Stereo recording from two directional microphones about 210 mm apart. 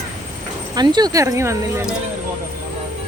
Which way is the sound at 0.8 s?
20° right (ahead or behind).